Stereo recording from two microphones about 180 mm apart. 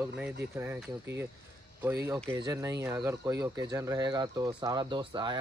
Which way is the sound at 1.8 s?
15° right (ahead or behind).